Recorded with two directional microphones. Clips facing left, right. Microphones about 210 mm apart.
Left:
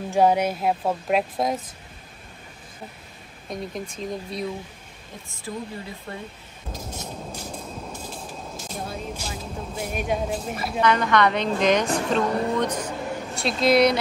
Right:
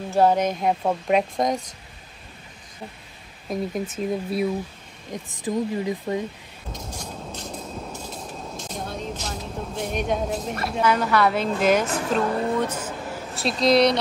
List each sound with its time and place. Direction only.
0.1 s speech: 10° left (ahead or behind)
3.4 s speech: 5° right (ahead or behind)
5.1 s speech: 15° right (ahead or behind)
8.5 s speech: 5° left (ahead or behind)